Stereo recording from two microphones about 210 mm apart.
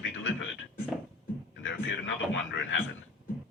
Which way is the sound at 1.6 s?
65° left (ahead or behind).